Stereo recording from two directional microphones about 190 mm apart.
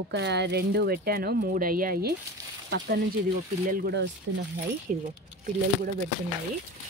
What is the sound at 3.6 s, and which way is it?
Speech, 50° right (ahead or behind).